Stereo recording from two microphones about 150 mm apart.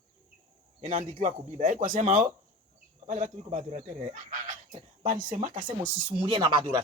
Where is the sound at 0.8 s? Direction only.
55° right (ahead or behind).